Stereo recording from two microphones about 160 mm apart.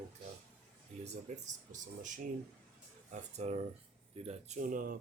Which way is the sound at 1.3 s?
50° right (ahead or behind).